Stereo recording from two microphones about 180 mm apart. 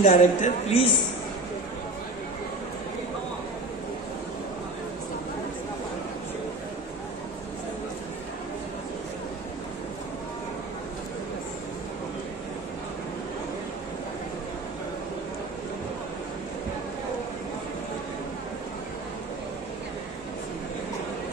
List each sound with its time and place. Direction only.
0.0 s speech: 40° left (ahead or behind)